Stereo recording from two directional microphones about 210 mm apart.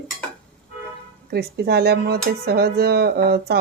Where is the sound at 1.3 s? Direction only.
50° right (ahead or behind).